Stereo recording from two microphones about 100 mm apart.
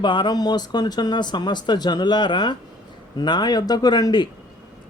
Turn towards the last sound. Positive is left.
turn(degrees=45)  # may be behind; listen again after turning